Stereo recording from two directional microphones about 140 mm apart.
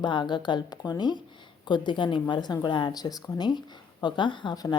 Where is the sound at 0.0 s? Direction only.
35° left (ahead or behind).